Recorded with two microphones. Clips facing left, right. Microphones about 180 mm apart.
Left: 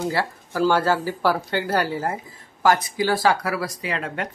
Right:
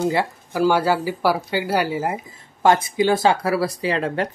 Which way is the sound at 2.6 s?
25° right (ahead or behind).